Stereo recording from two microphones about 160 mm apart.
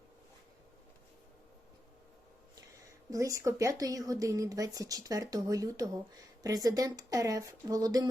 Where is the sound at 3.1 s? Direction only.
20° right (ahead or behind).